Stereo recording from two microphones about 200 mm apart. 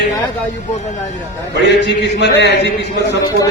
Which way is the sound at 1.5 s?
60° left (ahead or behind).